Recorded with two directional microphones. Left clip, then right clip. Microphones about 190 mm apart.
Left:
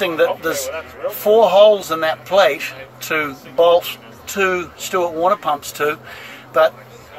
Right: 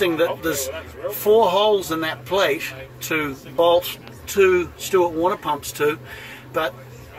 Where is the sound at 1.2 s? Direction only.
30° left (ahead or behind).